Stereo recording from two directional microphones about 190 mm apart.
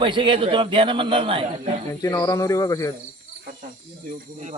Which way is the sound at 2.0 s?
20° left (ahead or behind).